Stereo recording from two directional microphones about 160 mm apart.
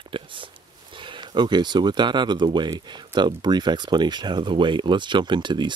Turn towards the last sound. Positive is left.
turn(degrees=-30)  # may be behind; listen again after turning